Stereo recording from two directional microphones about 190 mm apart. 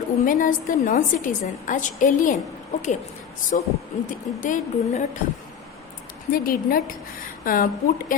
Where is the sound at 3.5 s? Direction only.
45° left (ahead or behind).